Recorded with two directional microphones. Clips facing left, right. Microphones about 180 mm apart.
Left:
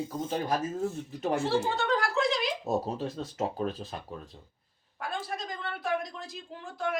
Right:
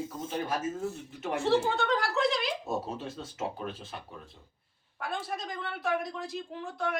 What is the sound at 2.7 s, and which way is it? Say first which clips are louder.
Speech: left 4 dB; 35° left (ahead or behind).